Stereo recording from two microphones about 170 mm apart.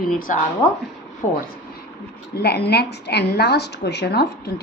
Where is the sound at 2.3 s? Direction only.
70° left (ahead or behind).